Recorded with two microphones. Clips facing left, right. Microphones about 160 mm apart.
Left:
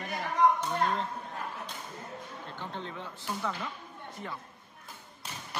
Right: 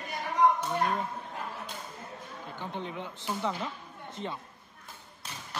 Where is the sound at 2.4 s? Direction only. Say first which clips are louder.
Right 4 dB; 15° right (ahead or behind).